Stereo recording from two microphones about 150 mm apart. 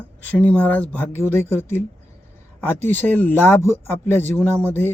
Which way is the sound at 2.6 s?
15° left (ahead or behind).